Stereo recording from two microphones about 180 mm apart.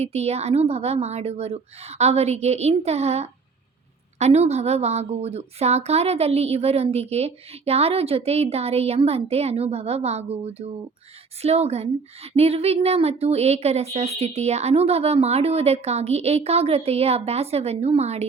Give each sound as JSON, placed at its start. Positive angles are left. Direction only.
{"t": 0.0, "sound": "speech", "side_deg": -35}